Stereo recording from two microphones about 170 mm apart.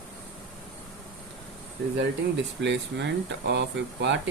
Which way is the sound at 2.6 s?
90° right.